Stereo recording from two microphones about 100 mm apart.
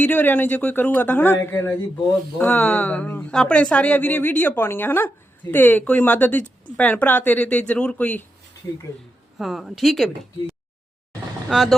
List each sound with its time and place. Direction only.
0.0 s a man's voice: 15° left (ahead or behind)
9.4 s speech: centre (ahead or behind)
11.4 s speech: centre (ahead or behind)